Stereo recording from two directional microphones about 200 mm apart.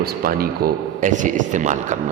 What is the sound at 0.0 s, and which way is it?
Speech, 45° right (ahead or behind).